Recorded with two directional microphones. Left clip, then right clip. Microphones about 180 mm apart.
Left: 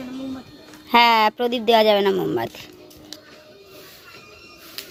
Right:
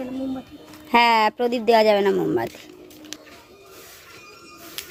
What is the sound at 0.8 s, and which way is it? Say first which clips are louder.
Speech: left 2 dB; 5° right (ahead or behind).